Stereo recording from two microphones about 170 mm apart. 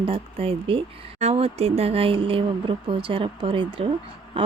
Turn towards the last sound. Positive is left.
turn(degrees=-30)  # may be behind; listen again after turning